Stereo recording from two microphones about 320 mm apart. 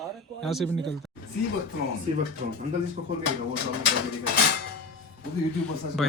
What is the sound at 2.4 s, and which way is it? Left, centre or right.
Speech, right.